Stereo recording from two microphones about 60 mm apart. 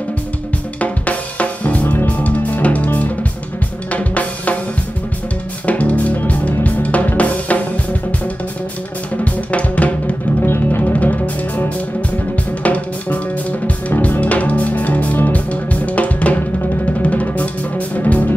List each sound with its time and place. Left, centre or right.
0.7 s drum kit: left
3.9 s drum: left
5.7 s drum: left
9.1 s drum: left
10.4 s music: left
11.0 s music: left
12.6 s music: left